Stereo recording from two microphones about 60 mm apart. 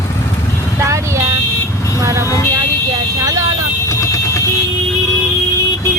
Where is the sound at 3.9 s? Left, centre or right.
Left.